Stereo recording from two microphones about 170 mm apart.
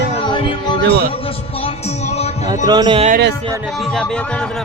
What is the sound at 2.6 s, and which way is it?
Speech, 25° right (ahead or behind).